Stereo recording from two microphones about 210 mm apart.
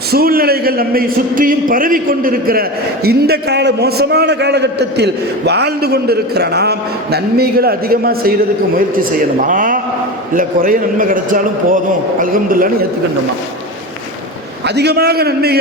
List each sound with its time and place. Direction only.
0.1 s a man's voice: 45° right (ahead or behind)
14.8 s a man's voice: 50° right (ahead or behind)